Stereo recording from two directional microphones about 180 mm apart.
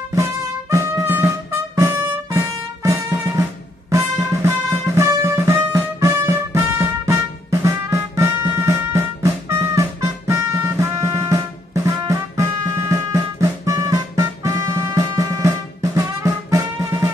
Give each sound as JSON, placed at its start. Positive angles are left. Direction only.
{"t": 0.1, "sound": "music", "side_deg": -15}